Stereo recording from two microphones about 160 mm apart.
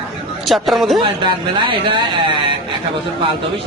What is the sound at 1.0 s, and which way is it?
Speech, 30° right (ahead or behind).